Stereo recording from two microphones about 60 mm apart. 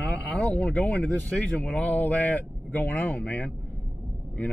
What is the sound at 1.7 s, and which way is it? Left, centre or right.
Speech, left.